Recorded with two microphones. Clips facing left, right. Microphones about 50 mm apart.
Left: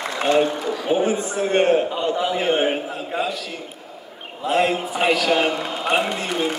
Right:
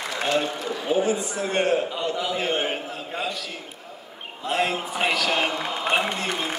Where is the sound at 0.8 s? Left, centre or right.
Left.